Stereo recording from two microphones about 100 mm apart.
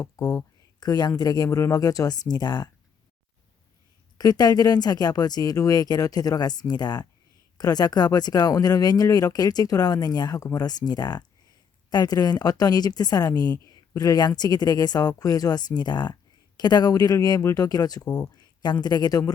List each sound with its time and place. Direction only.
0.0 s a woman's voice: 35° left (ahead or behind)
4.2 s a woman's voice: 40° left (ahead or behind)